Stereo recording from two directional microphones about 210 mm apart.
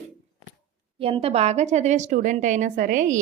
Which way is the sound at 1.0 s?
25° right (ahead or behind).